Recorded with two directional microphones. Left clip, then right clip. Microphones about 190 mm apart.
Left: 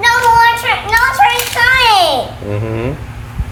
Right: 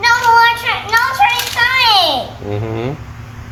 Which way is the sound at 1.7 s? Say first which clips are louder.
Left 1 dB; 25° left (ahead or behind).